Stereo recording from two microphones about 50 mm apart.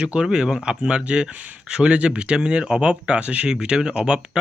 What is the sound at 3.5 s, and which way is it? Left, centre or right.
Speech, centre.